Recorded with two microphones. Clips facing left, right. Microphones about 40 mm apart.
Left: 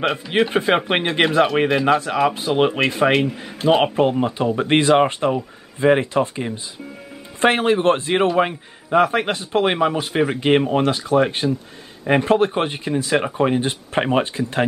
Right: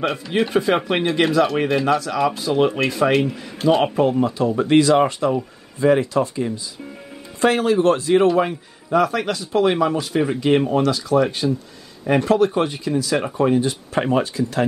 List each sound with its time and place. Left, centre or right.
0.4 s speech: left
1.7 s speech: centre
2.0 s speech: left